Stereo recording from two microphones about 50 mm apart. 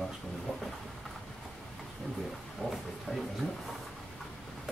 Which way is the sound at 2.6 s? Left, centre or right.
Centre.